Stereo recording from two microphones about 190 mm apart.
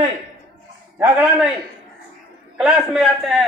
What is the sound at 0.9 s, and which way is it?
Speech, 5° right (ahead or behind).